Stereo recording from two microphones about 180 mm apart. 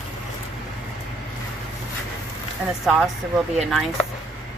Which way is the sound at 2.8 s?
5° right (ahead or behind).